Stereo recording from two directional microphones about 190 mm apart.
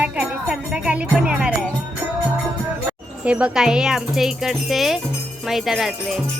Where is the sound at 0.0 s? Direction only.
5° right (ahead or behind).